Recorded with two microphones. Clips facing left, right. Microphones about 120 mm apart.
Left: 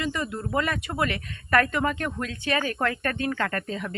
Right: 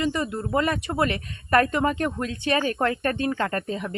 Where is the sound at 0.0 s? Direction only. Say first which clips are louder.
Right 4 dB; 30° right (ahead or behind).